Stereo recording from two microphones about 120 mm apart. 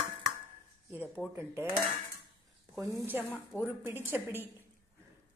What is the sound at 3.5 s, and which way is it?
Speech, 20° right (ahead or behind).